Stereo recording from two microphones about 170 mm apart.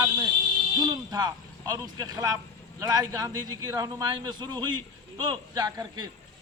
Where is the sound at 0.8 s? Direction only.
25° right (ahead or behind).